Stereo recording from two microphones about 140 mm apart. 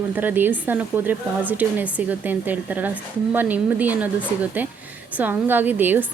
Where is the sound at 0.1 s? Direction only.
15° right (ahead or behind).